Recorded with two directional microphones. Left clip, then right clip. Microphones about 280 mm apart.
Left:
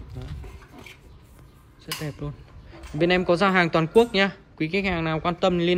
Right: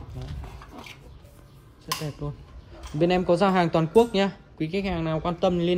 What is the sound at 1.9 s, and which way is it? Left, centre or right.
A woman's voice, centre.